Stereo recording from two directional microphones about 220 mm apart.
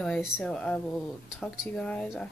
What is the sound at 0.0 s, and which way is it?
Speech, centre (ahead or behind).